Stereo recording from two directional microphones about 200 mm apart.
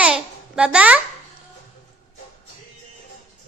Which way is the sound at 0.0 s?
5° right (ahead or behind).